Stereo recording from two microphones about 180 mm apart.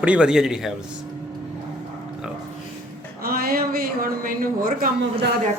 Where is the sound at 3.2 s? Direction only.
55° right (ahead or behind).